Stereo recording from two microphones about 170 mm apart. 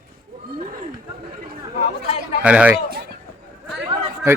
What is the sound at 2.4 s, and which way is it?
Speech, 10° right (ahead or behind).